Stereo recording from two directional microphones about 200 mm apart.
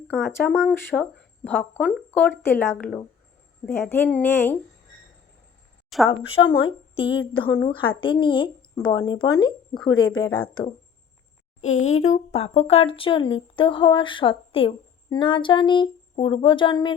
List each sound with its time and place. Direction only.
0.1 s a woman's voice: 10° left (ahead or behind)
6.1 s a woman's voice: 25° left (ahead or behind)
11.6 s a woman's voice: 35° left (ahead or behind)